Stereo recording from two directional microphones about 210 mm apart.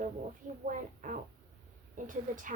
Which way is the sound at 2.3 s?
40° right (ahead or behind).